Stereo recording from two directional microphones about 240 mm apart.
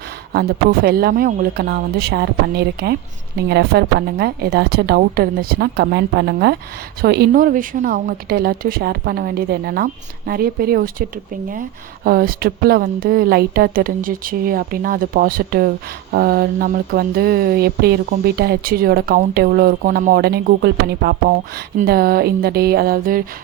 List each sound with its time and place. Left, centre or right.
0.3 s speech: right
12.0 s speech: right